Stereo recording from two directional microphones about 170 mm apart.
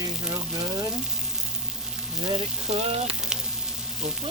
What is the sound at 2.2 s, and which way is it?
Frying, 30° right (ahead or behind).